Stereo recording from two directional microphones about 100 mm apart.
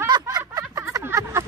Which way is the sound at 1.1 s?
25° right (ahead or behind).